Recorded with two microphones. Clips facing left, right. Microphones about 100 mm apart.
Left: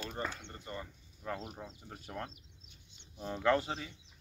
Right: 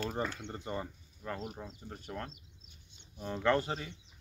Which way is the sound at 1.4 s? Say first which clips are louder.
Right 2 dB; centre (ahead or behind).